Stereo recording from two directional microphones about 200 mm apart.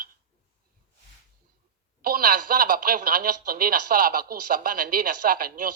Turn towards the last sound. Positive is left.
turn(degrees=-45)  # may be behind; listen again after turning